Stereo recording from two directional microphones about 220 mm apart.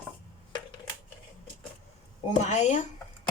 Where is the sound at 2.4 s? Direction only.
30° left (ahead or behind).